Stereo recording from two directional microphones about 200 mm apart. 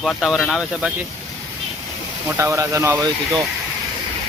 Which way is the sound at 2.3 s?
15° right (ahead or behind).